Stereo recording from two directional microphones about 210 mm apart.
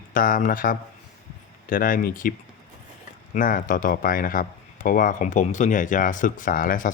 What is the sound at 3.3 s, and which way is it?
Speech, 40° left (ahead or behind).